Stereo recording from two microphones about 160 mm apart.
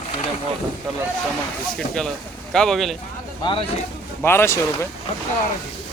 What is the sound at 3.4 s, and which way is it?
Speech, 35° left (ahead or behind).